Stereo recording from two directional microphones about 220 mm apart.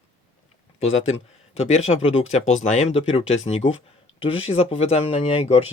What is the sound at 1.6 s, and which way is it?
Speech, 30° left (ahead or behind).